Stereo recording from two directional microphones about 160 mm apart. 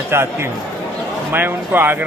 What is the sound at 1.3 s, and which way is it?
Speech, 15° right (ahead or behind).